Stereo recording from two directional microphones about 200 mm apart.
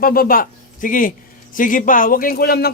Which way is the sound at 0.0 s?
45° left (ahead or behind).